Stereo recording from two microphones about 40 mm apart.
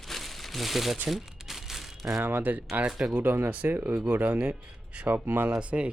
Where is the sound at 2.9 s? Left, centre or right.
Centre.